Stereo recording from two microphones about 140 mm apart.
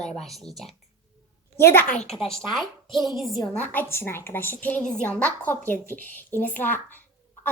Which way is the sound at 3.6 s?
15° left (ahead or behind).